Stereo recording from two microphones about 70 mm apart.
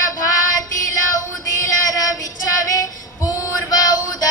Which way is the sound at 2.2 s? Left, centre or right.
Left.